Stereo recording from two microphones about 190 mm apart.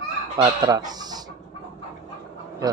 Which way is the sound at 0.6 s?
20° right (ahead or behind).